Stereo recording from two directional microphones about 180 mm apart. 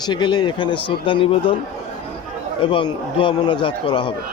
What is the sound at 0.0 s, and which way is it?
Speech, 25° left (ahead or behind).